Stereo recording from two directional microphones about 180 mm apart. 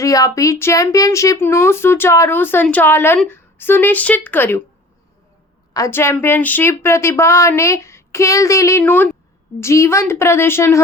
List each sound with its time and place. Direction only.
0.0 s speech: 20° left (ahead or behind)
5.7 s speech: 15° left (ahead or behind)